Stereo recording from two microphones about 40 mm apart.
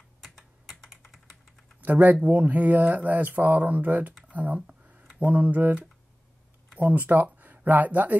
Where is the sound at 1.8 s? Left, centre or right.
Right.